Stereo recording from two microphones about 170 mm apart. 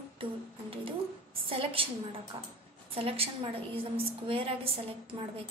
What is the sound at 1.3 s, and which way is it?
A woman's voice, 30° right (ahead or behind).